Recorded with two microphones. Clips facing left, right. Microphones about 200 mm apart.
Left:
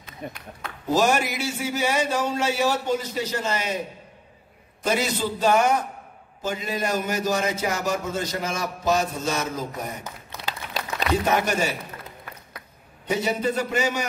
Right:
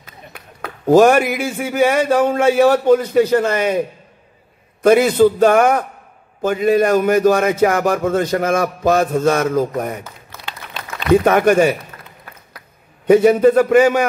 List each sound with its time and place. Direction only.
0.2 s speech: 50° left (ahead or behind)
0.8 s a man's voice: 55° right (ahead or behind)
4.8 s a man's voice: 55° right (ahead or behind)
10.4 s a sound: 40° left (ahead or behind)
11.2 s a man's voice: 55° right (ahead or behind)
13.0 s a man's voice: 55° right (ahead or behind)